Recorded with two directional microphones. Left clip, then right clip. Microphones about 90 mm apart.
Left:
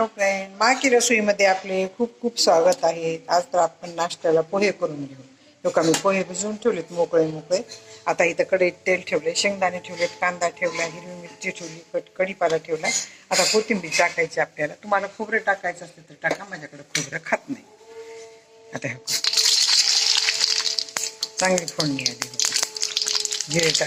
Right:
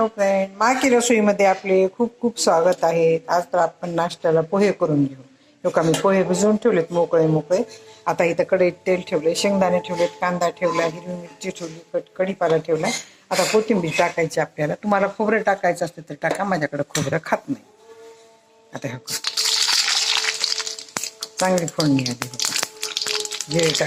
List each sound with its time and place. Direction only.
0.2 s speech: 30° right (ahead or behind)
14.3 s speech: 20° right (ahead or behind)
14.5 s speech: 30° right (ahead or behind)
18.7 s a sound: 30° right (ahead or behind)
21.2 s crumpling: 30° right (ahead or behind)